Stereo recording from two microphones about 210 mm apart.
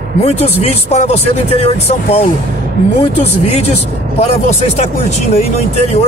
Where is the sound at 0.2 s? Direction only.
30° left (ahead or behind).